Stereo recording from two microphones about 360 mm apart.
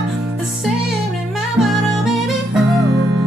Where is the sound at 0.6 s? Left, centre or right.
Centre.